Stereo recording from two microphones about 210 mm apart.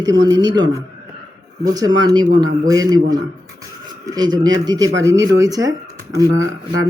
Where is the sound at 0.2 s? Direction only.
20° right (ahead or behind).